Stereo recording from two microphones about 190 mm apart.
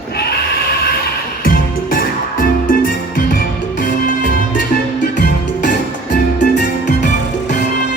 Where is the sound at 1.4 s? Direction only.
50° left (ahead or behind).